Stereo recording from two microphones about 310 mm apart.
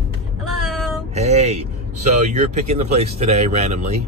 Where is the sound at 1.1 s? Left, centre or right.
Right.